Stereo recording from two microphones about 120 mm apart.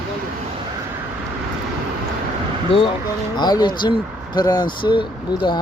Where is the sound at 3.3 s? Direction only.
35° left (ahead or behind).